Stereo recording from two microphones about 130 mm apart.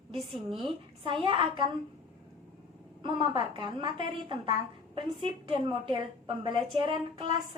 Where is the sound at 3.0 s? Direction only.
40° right (ahead or behind).